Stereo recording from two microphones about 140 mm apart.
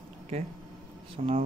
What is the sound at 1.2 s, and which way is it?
Speech, 45° right (ahead or behind).